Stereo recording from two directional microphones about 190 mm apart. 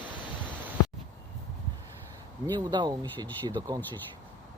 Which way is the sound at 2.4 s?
25° right (ahead or behind).